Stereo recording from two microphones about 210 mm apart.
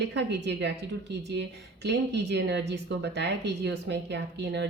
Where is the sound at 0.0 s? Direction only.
55° right (ahead or behind).